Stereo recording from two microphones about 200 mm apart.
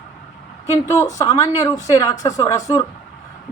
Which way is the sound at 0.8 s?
15° left (ahead or behind).